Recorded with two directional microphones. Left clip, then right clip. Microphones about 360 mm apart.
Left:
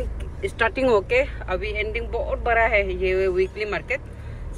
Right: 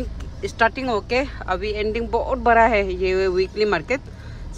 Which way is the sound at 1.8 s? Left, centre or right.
Centre.